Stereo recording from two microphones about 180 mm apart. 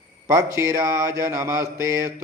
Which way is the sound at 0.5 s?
15° right (ahead or behind).